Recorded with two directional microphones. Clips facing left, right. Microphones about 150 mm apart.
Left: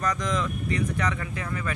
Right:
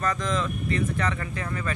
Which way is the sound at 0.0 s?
15° left (ahead or behind).